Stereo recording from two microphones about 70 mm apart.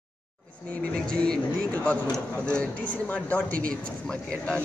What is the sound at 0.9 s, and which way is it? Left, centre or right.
A man's voice, centre.